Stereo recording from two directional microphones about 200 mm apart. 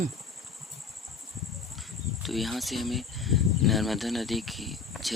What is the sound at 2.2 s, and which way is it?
Speech, centre (ahead or behind).